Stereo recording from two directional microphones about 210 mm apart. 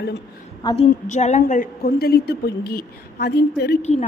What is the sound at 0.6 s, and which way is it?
Speech, 20° left (ahead or behind).